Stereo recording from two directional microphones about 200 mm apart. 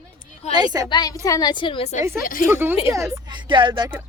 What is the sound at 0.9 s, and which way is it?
A woman's voice, 20° left (ahead or behind).